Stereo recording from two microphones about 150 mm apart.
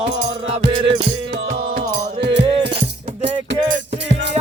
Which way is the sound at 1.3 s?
90° right.